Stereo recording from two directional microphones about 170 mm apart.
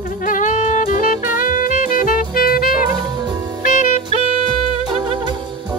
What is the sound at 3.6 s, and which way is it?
Saxophone, 50° left (ahead or behind).